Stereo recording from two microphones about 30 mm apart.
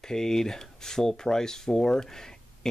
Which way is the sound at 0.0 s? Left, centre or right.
Centre.